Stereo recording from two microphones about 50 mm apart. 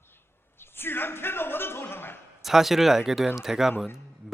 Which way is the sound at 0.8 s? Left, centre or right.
Left.